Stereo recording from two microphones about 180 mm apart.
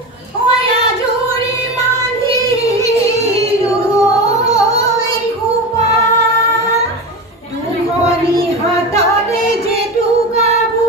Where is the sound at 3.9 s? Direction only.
20° left (ahead or behind).